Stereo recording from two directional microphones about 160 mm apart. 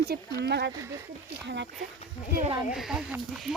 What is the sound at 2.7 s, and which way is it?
Speech, 5° right (ahead or behind).